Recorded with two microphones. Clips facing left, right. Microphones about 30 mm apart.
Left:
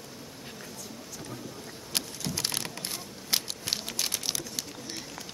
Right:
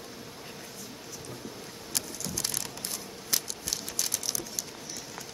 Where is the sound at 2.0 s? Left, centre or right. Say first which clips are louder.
Left 3 dB; left.